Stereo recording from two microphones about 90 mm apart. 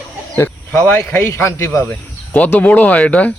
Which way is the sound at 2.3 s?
15° left (ahead or behind).